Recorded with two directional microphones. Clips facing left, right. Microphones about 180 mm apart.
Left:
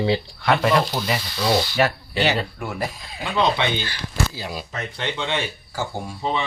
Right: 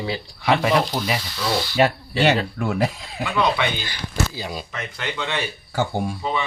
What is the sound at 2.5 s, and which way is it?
Speech, 80° right.